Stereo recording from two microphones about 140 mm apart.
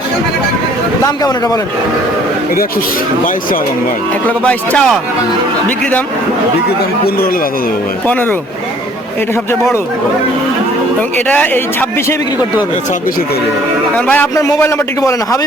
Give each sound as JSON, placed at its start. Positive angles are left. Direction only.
{"t": 1.0, "sound": "a man's voice", "side_deg": 25}
{"t": 4.3, "sound": "a man's voice", "side_deg": 10}
{"t": 8.0, "sound": "a man's voice", "side_deg": 15}
{"t": 11.3, "sound": "a man's voice", "side_deg": 10}
{"t": 13.9, "sound": "a man's voice", "side_deg": 10}